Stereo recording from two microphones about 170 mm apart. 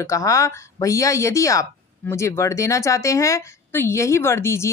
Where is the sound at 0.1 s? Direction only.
20° left (ahead or behind).